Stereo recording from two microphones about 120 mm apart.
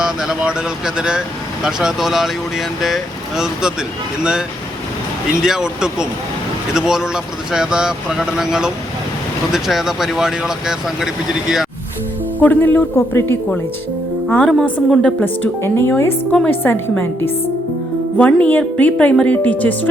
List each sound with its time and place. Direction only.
0.0 s speech: 5° right (ahead or behind)
12.4 s a woman's voice: 15° left (ahead or behind)